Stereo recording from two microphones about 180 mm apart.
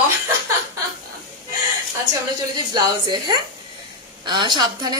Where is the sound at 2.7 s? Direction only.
25° right (ahead or behind).